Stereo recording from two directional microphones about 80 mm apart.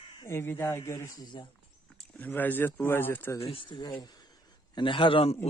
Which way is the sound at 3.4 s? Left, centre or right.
Left.